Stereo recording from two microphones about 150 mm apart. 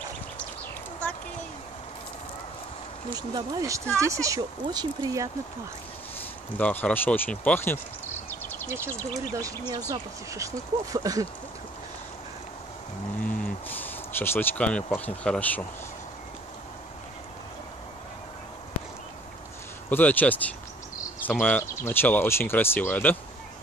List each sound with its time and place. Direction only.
3.2 s speech: 25° right (ahead or behind)
6.5 s speech: 10° left (ahead or behind)
8.3 s a sound: 15° left (ahead or behind)
8.6 s speech: 15° right (ahead or behind)
13.2 s a sound: 10° left (ahead or behind)
15.0 s speech: 10° left (ahead or behind)
19.9 s speech: 10° left (ahead or behind)